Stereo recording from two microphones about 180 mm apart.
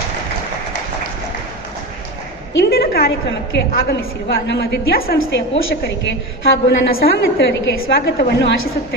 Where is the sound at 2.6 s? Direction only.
60° left (ahead or behind).